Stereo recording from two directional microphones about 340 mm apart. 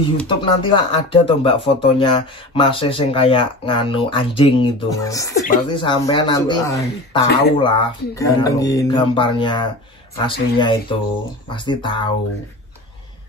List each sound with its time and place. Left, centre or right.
0.3 s speech: centre